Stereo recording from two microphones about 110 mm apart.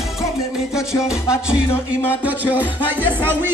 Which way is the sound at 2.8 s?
15° right (ahead or behind).